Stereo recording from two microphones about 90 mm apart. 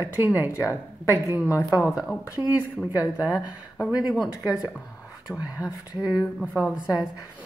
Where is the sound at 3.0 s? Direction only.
15° right (ahead or behind).